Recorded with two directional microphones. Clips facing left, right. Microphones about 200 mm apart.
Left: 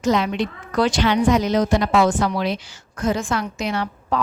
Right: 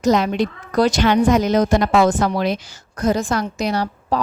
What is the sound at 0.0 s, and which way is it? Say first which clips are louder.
A woman's voice: right 3 dB; 40° right (ahead or behind).